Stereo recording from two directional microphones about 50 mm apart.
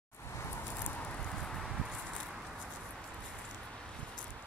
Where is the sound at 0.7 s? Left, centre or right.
Left.